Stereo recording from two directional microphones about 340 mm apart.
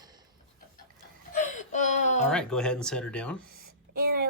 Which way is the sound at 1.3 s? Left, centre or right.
Left.